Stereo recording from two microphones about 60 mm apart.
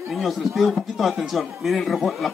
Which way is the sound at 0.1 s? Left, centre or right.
Centre.